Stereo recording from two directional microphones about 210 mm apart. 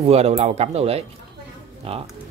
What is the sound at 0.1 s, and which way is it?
Speech, 30° right (ahead or behind).